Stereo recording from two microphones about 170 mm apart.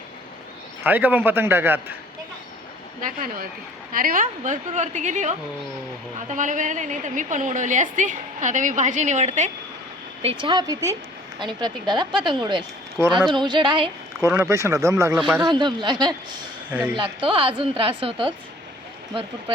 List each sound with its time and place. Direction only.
0.9 s a man's voice: 10° right (ahead or behind)
3.0 s a woman's voice: 50° right (ahead or behind)
10.4 s speech: 25° right (ahead or behind)
13.1 s speech: 5° right (ahead or behind)
13.3 s speech: 25° right (ahead or behind)
14.2 s a man's voice: 15° right (ahead or behind)
16.6 s speech: 10° right (ahead or behind)
17.2 s a woman's voice: 30° right (ahead or behind)